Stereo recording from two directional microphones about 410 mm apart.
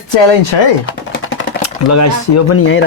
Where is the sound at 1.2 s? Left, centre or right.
Left.